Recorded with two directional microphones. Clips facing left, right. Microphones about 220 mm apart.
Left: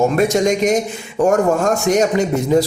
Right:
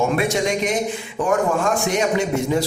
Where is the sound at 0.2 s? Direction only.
40° left (ahead or behind).